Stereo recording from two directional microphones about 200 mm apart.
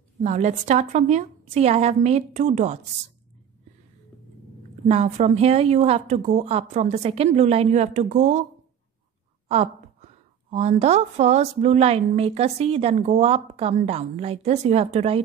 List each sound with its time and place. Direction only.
0.2 s a woman's voice: 35° right (ahead or behind)
4.8 s a woman's voice: 30° right (ahead or behind)
9.5 s a woman's voice: 30° right (ahead or behind)